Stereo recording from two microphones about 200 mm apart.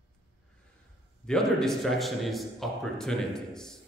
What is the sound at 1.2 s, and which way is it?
A man's voice, 5° left (ahead or behind).